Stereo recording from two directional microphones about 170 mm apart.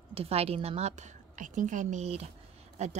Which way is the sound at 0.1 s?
35° right (ahead or behind).